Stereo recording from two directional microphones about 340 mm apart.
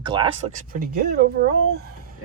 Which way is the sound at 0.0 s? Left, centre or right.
Centre.